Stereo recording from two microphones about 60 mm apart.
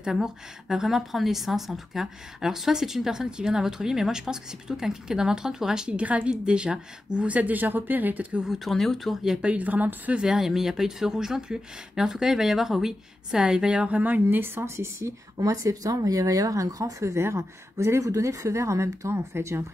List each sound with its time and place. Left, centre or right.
0.0 s a woman's voice: centre
5.9 s speech: right
8.6 s speech: centre
9.5 s speech: right
10.2 s a woman's voice: centre; by 15.1 s right
15.3 s speech: right
17.0 s speech: right